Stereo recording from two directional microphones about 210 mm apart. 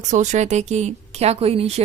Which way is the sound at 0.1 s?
35° right (ahead or behind).